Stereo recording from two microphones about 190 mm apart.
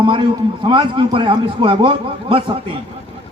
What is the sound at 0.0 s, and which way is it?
A man's voice, 25° right (ahead or behind).